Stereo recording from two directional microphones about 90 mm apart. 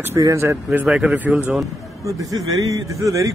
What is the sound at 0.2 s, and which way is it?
Speech, 35° right (ahead or behind).